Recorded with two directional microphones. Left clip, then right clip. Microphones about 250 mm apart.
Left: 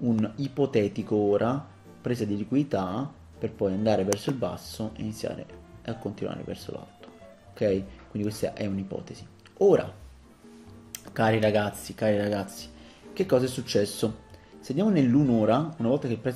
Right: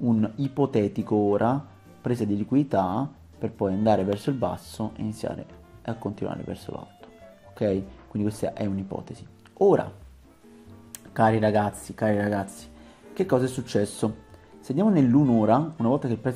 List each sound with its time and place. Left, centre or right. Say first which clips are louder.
0.0 s speech: right 2 dB; centre
11.1 s speech: right 2 dB; centre